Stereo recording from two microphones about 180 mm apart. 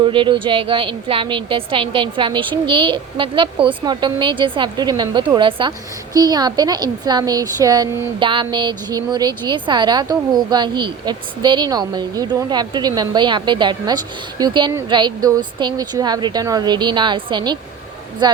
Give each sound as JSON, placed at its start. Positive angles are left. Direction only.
{"t": 0.0, "sound": "speech", "side_deg": -25}